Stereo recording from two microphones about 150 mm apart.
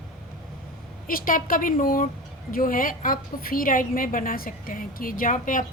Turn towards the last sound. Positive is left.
turn(degrees=65)  # may be behind; listen again after turning